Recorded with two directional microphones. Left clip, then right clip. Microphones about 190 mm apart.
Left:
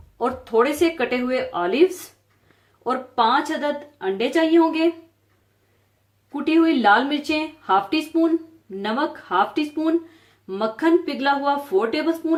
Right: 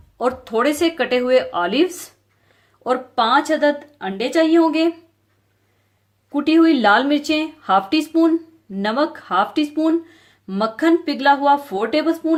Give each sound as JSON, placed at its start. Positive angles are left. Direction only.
{"t": 0.2, "sound": "speech", "side_deg": -50}
{"t": 6.3, "sound": "speech", "side_deg": -50}